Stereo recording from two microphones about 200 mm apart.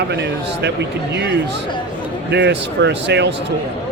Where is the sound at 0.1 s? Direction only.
60° right (ahead or behind).